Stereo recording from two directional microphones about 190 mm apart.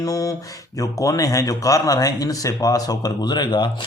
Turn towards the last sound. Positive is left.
turn(degrees=25)  # may be behind; listen again after turning